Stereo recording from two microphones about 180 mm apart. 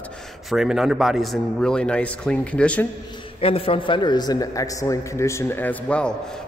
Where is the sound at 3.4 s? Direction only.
30° left (ahead or behind).